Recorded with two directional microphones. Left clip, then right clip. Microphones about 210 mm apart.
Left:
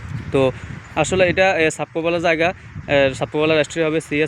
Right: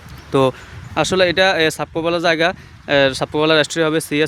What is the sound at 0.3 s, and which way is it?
Speech, 15° right (ahead or behind).